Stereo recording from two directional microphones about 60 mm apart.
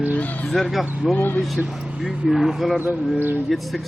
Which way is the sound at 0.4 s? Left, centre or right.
Centre.